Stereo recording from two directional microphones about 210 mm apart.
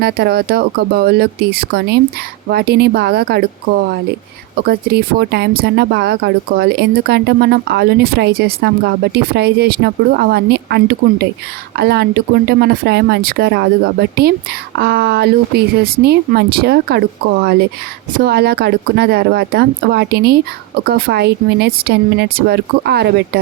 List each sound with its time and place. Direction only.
0.0 s speech: 50° right (ahead or behind)
4.5 s speech: 50° right (ahead or behind)
18.2 s speech: 50° right (ahead or behind)